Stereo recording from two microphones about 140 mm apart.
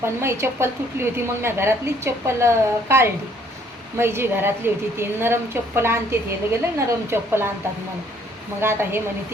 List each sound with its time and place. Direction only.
0.0 s a woman's voice: 20° right (ahead or behind)
8.6 s a woman's voice: 15° right (ahead or behind)